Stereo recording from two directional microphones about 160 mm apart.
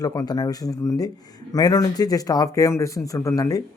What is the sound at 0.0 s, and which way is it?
Speech, 20° left (ahead or behind).